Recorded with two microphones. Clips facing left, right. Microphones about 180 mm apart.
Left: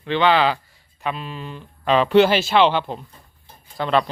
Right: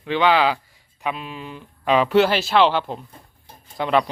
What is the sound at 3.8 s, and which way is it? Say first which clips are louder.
Speech: even; 15° right (ahead or behind).